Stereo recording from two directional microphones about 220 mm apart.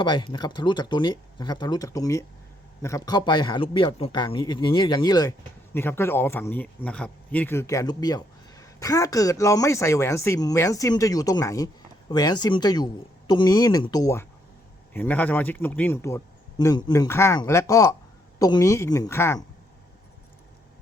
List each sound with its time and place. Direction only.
0.0 s a man's voice: 20° left (ahead or behind)